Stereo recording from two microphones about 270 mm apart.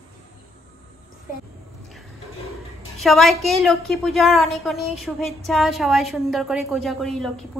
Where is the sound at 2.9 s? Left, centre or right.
Centre.